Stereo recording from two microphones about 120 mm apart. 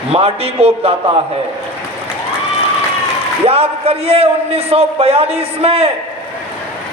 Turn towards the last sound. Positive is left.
turn(degrees=-55)  # may be behind; listen again after turning